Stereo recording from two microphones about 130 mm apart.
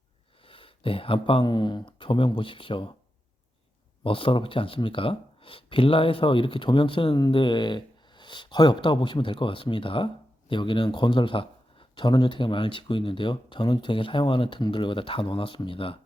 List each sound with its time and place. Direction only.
0.4 s speech: 40° left (ahead or behind)
4.0 s speech: 40° left (ahead or behind)